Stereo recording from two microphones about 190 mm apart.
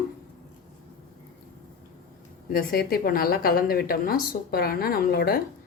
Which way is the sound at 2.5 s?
50° left (ahead or behind).